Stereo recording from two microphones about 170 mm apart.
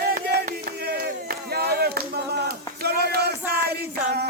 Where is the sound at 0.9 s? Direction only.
65° right (ahead or behind).